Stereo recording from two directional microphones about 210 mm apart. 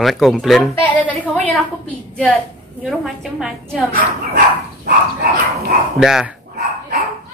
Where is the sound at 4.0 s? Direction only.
45° right (ahead or behind).